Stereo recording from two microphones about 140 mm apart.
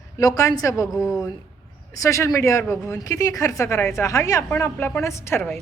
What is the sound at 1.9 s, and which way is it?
A woman's voice, 25° left (ahead or behind).